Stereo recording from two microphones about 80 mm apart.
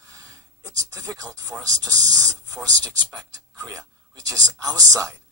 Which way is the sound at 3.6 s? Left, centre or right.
Right.